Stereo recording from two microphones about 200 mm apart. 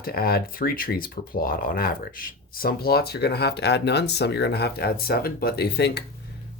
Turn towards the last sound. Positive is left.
turn(degrees=55)  # may be behind; listen again after turning